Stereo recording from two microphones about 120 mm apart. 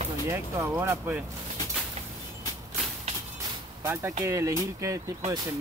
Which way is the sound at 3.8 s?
20° right (ahead or behind).